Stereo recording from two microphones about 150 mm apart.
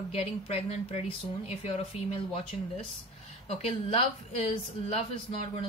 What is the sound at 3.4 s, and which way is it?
A woman's voice, 40° left (ahead or behind).